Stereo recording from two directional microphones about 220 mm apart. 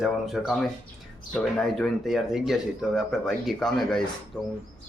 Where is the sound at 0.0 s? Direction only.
Centre (ahead or behind).